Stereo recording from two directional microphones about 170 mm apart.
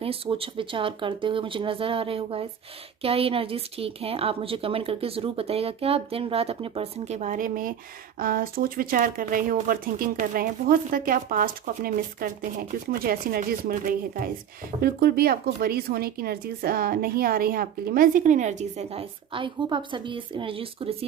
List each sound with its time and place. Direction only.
0.0 s a woman's voice: 35° right (ahead or behind); by 14.3 s 55° right (ahead or behind)
14.8 s speech: 65° right (ahead or behind); by 20.9 s 30° right (ahead or behind)